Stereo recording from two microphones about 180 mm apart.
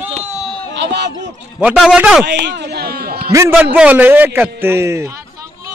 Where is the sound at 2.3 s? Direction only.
70° right (ahead or behind).